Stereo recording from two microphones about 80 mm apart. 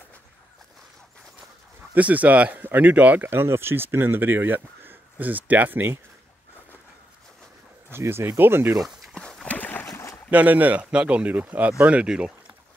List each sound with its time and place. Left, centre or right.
2.0 s speech: centre
7.9 s speech: right
9.1 s horse: centre
9.5 s a sound: left
9.8 s boat: left
10.3 s speech: centre